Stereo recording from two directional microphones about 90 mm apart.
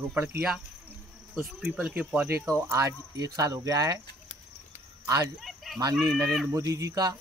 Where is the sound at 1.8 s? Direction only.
15° right (ahead or behind); by 4.0 s 40° right (ahead or behind).